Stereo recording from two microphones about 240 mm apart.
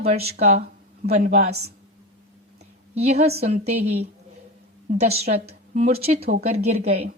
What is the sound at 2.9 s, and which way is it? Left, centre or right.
Speech, right.